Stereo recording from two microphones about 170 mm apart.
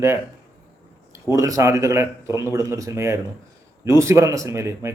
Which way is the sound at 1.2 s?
20° right (ahead or behind).